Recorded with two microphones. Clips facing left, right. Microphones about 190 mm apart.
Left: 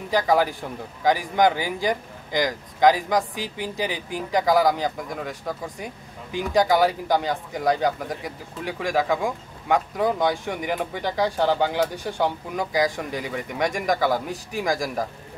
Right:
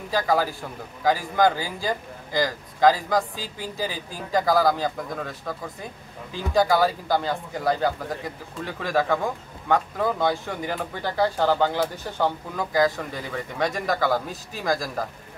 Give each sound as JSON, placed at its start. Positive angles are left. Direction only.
{"t": 0.1, "sound": "speech", "side_deg": 15}
{"t": 6.3, "sound": "speech", "side_deg": 15}